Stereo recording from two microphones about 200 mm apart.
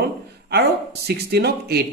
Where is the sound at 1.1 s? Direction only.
55° right (ahead or behind).